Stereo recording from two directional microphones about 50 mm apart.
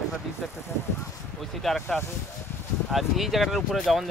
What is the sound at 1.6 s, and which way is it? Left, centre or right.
Speech, centre.